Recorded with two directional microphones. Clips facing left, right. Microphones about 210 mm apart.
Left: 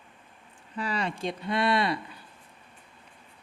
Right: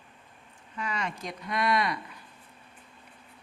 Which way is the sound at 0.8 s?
30° left (ahead or behind).